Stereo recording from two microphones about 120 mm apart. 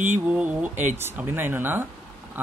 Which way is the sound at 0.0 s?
15° right (ahead or behind).